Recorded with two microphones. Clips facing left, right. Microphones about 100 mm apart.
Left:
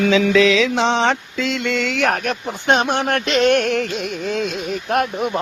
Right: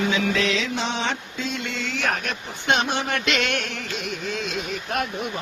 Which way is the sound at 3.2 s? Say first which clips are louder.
Left 10 dB; 35° left (ahead or behind).